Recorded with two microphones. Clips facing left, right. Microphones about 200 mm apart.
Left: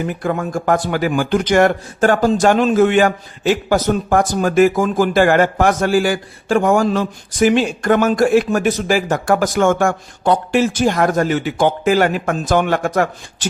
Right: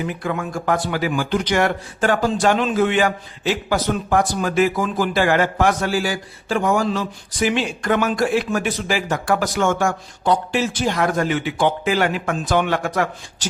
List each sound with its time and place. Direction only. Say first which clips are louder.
0.0 s a man's voice: left 4 dB; 45° left (ahead or behind)